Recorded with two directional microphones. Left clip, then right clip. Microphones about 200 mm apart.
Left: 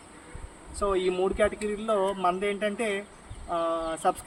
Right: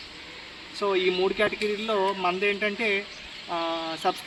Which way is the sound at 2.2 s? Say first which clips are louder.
Right 2 dB; centre (ahead or behind).